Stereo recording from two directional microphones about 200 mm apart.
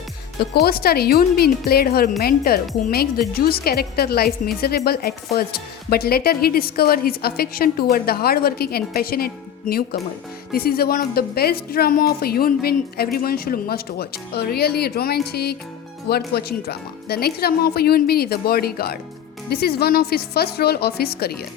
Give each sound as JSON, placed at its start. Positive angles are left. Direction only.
{"t": 0.3, "sound": "speech", "side_deg": 50}